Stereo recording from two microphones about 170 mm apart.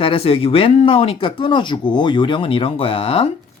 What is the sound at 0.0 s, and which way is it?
Speech, 35° left (ahead or behind).